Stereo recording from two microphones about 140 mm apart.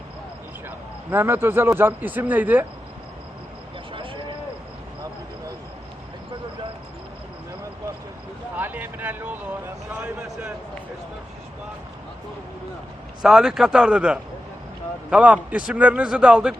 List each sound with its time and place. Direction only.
1.1 s a man's voice: 15° right (ahead or behind)
3.9 s a sound: 40° right (ahead or behind)
8.5 s a man's voice: 15° right (ahead or behind)
13.2 s a man's voice: 5° right (ahead or behind)